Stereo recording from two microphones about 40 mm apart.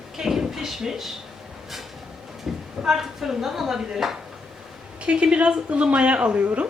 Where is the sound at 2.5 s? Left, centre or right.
Centre.